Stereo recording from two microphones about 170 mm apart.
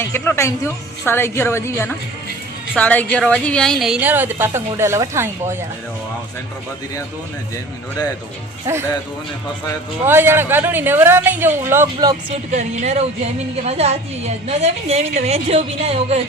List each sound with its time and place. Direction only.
0.0 s a woman's voice: 15° left (ahead or behind); by 5.5 s 15° right (ahead or behind)
10.1 s a woman's voice: 15° right (ahead or behind)
12.5 s a woman's voice: 45° right (ahead or behind)